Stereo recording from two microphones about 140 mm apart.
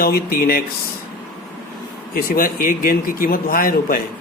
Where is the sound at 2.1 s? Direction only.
90° left.